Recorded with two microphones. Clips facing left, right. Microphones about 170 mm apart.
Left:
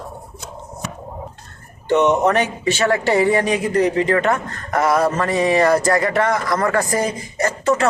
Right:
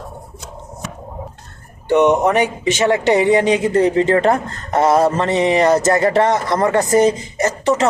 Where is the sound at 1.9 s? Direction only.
10° right (ahead or behind).